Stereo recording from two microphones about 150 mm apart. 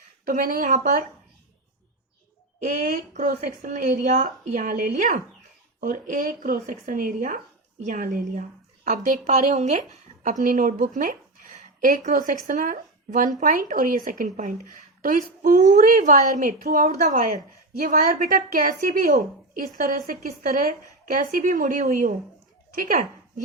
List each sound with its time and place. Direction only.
0.3 s a woman's voice: 65° right (ahead or behind)
2.6 s a woman's voice: 55° right (ahead or behind)
16.6 s a woman's voice: 70° right (ahead or behind)
16.9 s a woman's voice: 50° right (ahead or behind)